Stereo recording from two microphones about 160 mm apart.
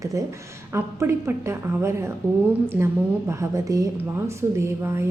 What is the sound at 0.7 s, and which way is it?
A woman's voice, 15° right (ahead or behind).